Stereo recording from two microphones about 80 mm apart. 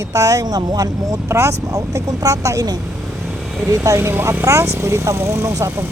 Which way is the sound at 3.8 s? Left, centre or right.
Right.